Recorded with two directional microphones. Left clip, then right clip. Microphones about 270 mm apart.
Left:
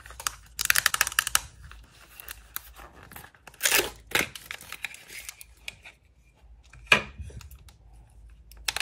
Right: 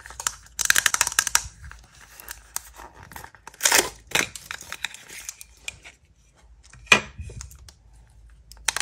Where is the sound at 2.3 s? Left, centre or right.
Centre.